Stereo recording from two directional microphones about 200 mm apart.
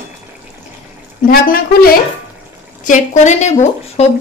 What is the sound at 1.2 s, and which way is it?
Speech, 45° left (ahead or behind).